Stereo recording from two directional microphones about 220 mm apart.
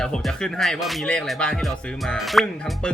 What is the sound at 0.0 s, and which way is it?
Music, centre (ahead or behind).